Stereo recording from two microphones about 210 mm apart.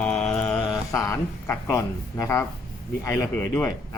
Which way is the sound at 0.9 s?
15° left (ahead or behind).